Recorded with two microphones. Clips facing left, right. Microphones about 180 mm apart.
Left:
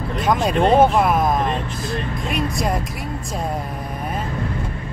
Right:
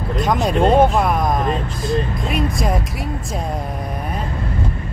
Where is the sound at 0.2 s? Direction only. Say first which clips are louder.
Right 1 dB; centre (ahead or behind).